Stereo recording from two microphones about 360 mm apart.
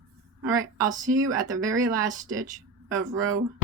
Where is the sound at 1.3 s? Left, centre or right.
Centre.